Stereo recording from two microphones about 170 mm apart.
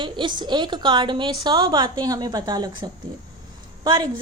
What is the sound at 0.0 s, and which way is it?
A woman's voice, 25° right (ahead or behind).